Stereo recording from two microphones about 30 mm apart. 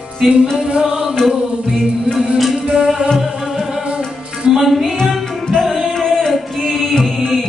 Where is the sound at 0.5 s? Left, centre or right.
Right.